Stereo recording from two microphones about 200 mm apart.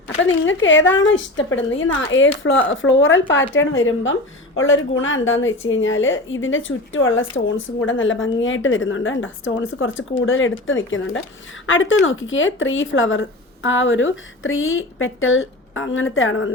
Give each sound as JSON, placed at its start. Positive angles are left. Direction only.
{"t": 0.2, "sound": "speech", "side_deg": 70}